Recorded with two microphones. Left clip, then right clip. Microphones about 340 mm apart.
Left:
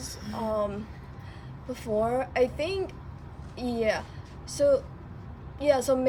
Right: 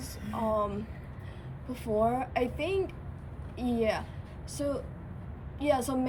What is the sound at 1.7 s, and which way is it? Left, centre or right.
A woman's voice, left.